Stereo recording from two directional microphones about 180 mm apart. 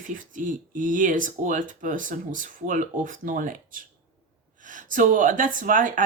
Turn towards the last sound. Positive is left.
turn(degrees=-45)  # may be behind; listen again after turning